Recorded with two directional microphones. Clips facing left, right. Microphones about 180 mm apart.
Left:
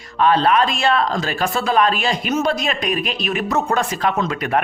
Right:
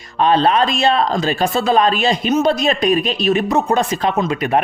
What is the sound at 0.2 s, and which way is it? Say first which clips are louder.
Speech: right 2 dB; 25° right (ahead or behind).